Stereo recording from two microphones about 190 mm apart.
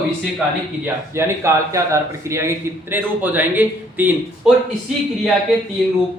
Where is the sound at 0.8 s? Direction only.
15° right (ahead or behind).